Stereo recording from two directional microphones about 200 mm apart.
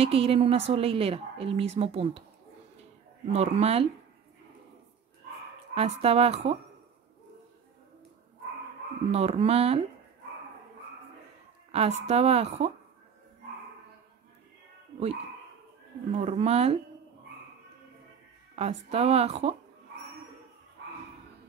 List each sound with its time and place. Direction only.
0.0 s speech: 30° right (ahead or behind)
3.3 s a woman's voice: 30° right (ahead or behind)
5.8 s a woman's voice: 30° right (ahead or behind)
9.1 s a woman's voice: 30° right (ahead or behind)
11.7 s a woman's voice: 30° right (ahead or behind)
16.1 s a woman's voice: 35° right (ahead or behind)
18.6 s a woman's voice: 30° right (ahead or behind)